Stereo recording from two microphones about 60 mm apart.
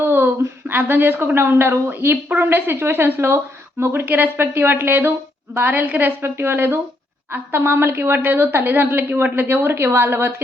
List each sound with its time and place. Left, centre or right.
0.0 s a woman's voice: right
6.2 s a woman's voice: right